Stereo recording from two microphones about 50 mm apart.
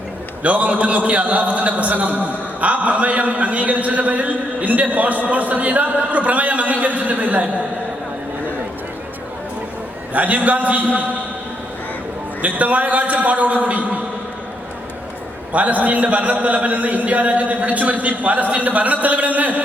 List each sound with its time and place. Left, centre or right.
0.4 s a man's voice: right
10.2 s a man's voice: right
12.4 s a man's voice: right
15.5 s a man's voice: right